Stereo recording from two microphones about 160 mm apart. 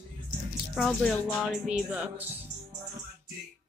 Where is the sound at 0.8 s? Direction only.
5° left (ahead or behind).